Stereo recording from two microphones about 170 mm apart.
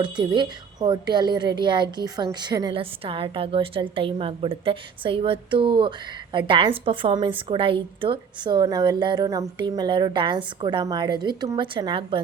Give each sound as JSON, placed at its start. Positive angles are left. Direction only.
{"t": 0.0, "sound": "a woman's voice", "side_deg": -25}